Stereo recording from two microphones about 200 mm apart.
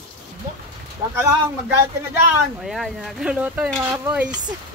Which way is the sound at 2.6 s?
Centre (ahead or behind).